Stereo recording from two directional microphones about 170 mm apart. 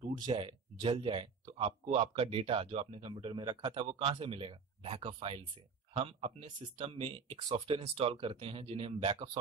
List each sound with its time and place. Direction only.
0.2 s speech: 30° right (ahead or behind)